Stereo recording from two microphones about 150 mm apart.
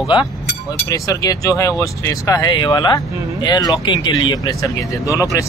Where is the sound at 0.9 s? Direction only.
25° left (ahead or behind).